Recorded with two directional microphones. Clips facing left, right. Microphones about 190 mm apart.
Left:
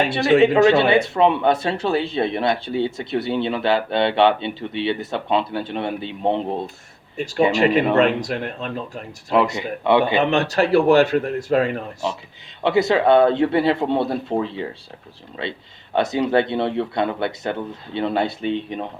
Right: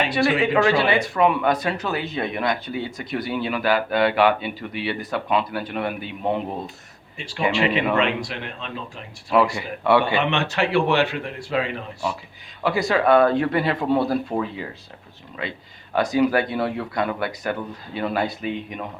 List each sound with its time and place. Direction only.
0.3 s speech: 25° left (ahead or behind)
7.2 s speech: 45° left (ahead or behind)
9.3 s speech: 20° left (ahead or behind)
10.2 s speech: 40° left (ahead or behind)
12.6 s speech: 25° left (ahead or behind)